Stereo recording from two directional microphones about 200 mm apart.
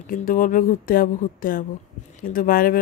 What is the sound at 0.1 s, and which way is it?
A woman's voice, 45° left (ahead or behind).